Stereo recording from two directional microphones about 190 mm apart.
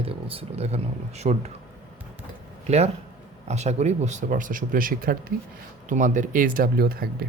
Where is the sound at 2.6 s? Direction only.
35° right (ahead or behind).